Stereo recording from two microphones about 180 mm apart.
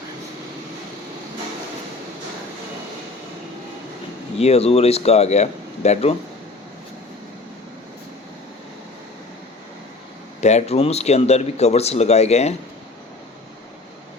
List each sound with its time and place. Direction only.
4.4 s speech: 35° left (ahead or behind)
10.4 s speech: 35° left (ahead or behind)